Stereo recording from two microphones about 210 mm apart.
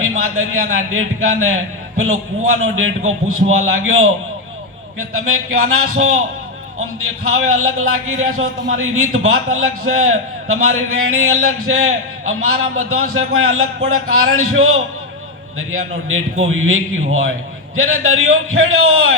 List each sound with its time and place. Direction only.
0.3 s speech: 80° right
7.3 s a man's voice: 85° right